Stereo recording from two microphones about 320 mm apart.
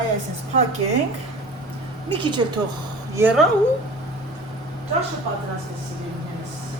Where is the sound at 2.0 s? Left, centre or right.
Centre.